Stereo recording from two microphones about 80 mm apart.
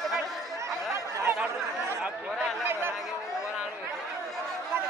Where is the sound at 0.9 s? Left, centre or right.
Right.